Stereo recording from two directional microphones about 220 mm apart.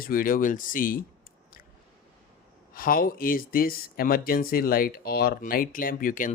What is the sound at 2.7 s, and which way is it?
Speech, 40° left (ahead or behind).